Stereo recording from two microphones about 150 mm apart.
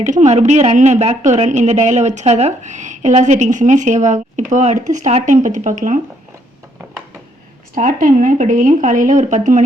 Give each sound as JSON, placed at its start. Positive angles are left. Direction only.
{"t": 0.0, "sound": "a woman's voice", "side_deg": -50}
{"t": 7.8, "sound": "speech", "side_deg": -60}